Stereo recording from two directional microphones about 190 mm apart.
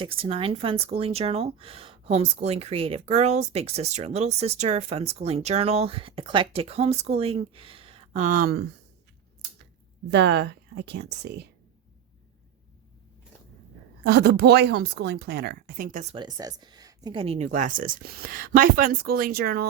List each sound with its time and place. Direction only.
0.0 s speech: 30° right (ahead or behind); by 8.6 s 50° right (ahead or behind)
10.1 s speech: 65° right (ahead or behind)
14.0 s speech: 60° right (ahead or behind)
16.1 s speech: 20° right (ahead or behind); by 19.6 s 55° right (ahead or behind)